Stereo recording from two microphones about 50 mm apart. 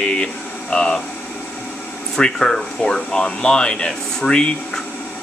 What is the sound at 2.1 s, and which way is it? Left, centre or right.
Speech, centre.